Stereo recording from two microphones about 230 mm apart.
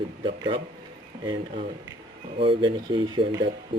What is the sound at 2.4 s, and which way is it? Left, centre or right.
Speech, right.